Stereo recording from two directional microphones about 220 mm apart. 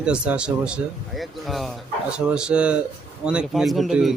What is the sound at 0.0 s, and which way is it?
Speech, 5° right (ahead or behind).